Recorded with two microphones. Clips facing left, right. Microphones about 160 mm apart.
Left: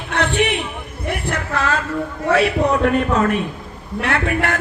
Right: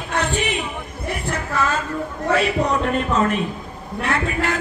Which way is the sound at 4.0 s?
65° left (ahead or behind).